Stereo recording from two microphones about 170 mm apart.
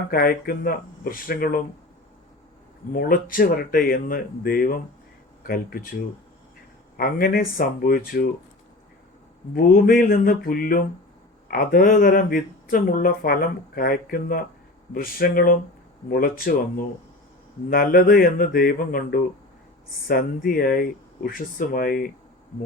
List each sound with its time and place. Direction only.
0.1 s speech: 60° left (ahead or behind)
2.9 s speech: 55° left (ahead or behind)
6.9 s speech: 55° left (ahead or behind)
9.6 s speech: 60° left (ahead or behind)